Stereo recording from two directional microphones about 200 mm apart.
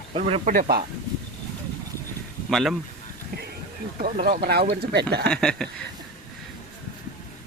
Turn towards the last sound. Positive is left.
turn(degrees=5)  # may be behind; listen again after turning